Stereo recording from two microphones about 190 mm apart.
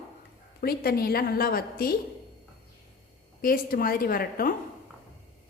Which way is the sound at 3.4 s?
50° left (ahead or behind).